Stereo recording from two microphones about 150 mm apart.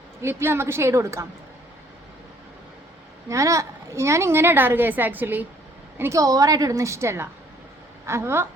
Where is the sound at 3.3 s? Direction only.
20° right (ahead or behind).